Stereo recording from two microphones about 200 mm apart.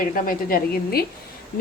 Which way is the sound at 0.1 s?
45° left (ahead or behind).